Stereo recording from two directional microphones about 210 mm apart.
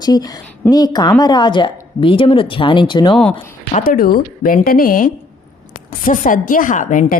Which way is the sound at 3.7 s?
40° left (ahead or behind).